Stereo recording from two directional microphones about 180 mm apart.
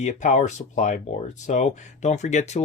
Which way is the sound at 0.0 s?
45° left (ahead or behind).